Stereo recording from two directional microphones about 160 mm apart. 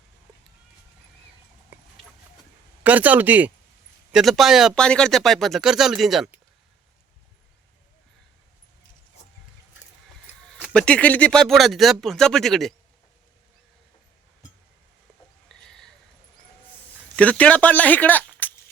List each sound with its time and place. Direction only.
1.7 s clip-clop: 10° right (ahead or behind)
2.8 s speech: 10° right (ahead or behind)
10.6 s speech: 5° left (ahead or behind)
15.4 s a sound: 5° left (ahead or behind)
17.2 s speech: 10° left (ahead or behind)